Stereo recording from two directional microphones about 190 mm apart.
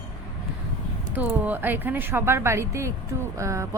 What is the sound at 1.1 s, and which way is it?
Speech, 10° right (ahead or behind).